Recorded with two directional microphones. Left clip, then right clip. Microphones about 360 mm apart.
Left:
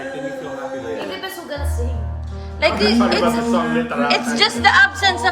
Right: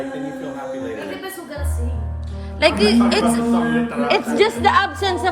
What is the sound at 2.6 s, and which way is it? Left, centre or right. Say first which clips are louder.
A man's voice: right 1 dB; right.